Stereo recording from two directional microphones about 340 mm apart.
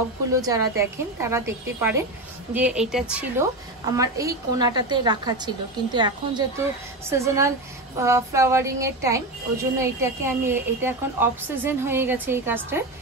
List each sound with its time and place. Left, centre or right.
0.3 s a woman's voice: centre